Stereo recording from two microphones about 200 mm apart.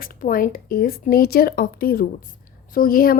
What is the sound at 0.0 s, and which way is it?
A woman's voice, 45° left (ahead or behind).